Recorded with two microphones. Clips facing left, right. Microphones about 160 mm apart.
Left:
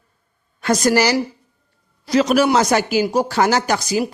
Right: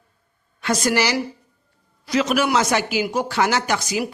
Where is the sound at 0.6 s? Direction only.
40° left (ahead or behind).